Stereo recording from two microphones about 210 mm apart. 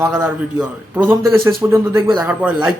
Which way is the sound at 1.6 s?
10° right (ahead or behind).